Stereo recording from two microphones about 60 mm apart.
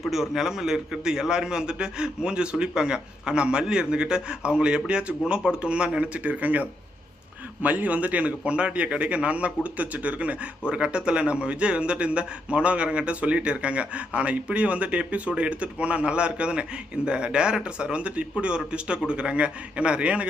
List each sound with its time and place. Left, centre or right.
0.0 s a man's voice: centre